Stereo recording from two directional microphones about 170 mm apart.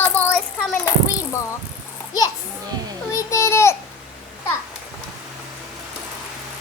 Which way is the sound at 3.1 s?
15° left (ahead or behind).